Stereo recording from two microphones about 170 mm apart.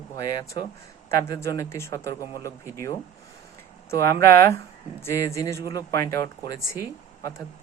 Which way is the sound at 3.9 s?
15° left (ahead or behind).